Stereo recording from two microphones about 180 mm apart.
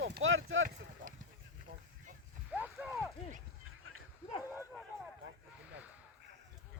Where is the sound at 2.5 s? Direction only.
5° right (ahead or behind).